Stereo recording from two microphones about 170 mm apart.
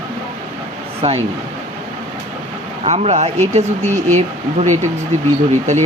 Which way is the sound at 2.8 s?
40° right (ahead or behind).